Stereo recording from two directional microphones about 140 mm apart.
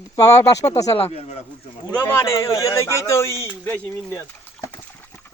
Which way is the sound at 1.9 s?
15° left (ahead or behind).